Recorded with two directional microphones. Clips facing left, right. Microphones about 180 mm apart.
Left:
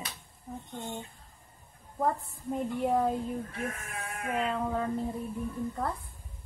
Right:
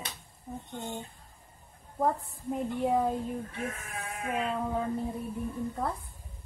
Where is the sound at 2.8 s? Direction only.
5° right (ahead or behind).